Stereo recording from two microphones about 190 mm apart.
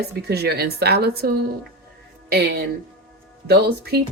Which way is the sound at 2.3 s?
60° right (ahead or behind).